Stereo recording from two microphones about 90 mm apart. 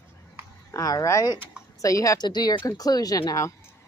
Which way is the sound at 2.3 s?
55° left (ahead or behind).